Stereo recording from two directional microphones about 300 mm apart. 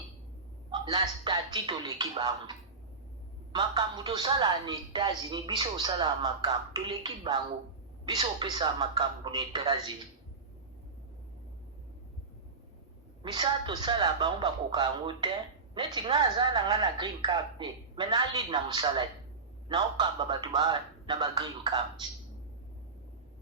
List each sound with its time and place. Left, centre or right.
0.7 s speech: centre
13.2 s speech: centre